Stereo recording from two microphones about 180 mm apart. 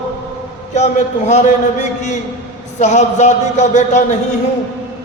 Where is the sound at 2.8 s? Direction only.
40° left (ahead or behind).